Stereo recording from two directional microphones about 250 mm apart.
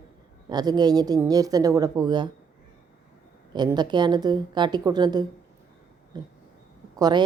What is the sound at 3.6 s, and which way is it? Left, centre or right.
A woman's voice, centre.